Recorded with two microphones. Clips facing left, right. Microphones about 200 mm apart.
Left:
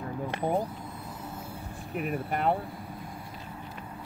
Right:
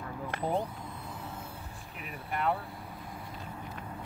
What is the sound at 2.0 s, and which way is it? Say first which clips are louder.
Speech: left 8 dB; 50° left (ahead or behind).